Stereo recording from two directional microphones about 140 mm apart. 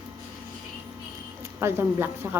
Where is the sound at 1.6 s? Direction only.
15° right (ahead or behind).